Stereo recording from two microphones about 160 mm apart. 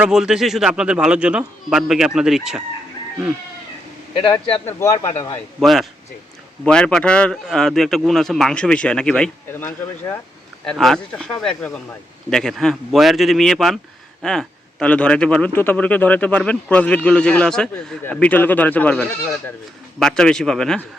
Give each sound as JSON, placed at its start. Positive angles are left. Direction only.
{"t": 0.0, "sound": "speech", "side_deg": -5}
{"t": 4.2, "sound": "speech", "side_deg": 35}
{"t": 4.6, "sound": "a man's voice", "side_deg": 15}
{"t": 5.5, "sound": "speech", "side_deg": 0}
{"t": 10.6, "sound": "a man's voice", "side_deg": 5}